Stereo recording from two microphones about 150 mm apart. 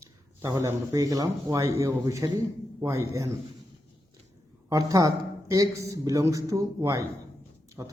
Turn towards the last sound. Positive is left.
turn(degrees=-20)  # may be behind; listen again after turning